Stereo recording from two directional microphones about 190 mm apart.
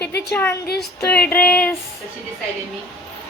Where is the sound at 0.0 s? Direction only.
60° left (ahead or behind).